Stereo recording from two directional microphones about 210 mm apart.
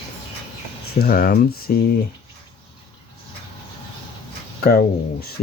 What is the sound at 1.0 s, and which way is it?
Speech, 45° left (ahead or behind).